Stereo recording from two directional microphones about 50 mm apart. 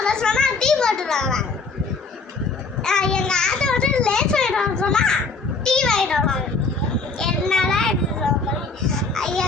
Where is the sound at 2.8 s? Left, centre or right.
Centre.